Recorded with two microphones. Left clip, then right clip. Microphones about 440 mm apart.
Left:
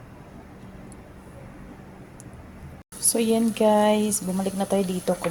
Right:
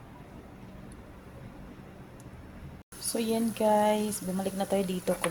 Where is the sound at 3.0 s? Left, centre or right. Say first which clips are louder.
Left 8 dB; right.